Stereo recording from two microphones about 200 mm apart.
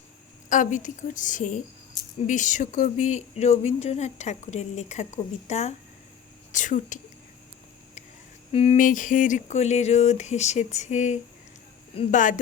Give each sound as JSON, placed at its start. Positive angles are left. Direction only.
{"t": 0.5, "sound": "speech", "side_deg": 40}
{"t": 8.5, "sound": "speech", "side_deg": 35}